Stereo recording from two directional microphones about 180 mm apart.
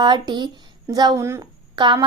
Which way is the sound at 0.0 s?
25° right (ahead or behind).